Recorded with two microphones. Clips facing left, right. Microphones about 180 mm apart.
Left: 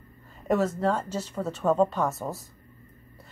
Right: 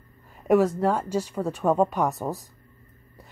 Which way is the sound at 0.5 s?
10° right (ahead or behind).